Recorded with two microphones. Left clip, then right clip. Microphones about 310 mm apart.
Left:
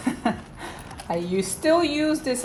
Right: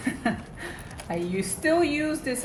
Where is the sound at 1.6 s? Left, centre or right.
Centre.